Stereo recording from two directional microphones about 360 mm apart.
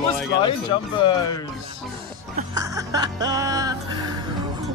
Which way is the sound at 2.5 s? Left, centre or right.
Centre.